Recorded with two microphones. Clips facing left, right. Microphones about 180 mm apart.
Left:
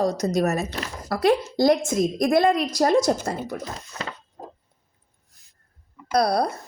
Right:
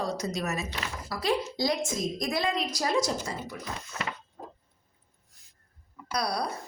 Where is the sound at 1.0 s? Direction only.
55° left (ahead or behind).